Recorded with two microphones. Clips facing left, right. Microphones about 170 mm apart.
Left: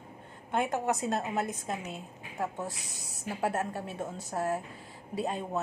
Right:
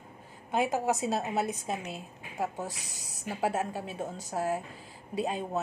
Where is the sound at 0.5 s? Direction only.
5° right (ahead or behind).